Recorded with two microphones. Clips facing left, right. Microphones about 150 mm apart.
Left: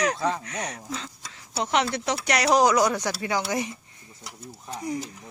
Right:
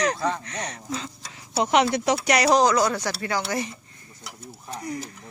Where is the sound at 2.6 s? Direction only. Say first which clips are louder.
Even; 15° left (ahead or behind).